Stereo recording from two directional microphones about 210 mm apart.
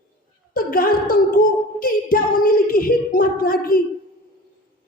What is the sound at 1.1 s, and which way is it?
A woman's voice, 40° left (ahead or behind).